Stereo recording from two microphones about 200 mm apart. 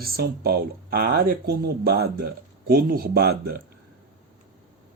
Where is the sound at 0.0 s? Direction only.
50° right (ahead or behind).